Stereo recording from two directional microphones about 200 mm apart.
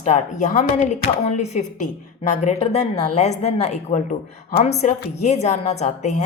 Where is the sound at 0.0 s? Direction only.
35° left (ahead or behind).